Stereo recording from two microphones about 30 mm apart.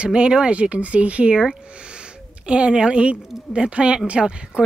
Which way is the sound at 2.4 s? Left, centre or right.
Right.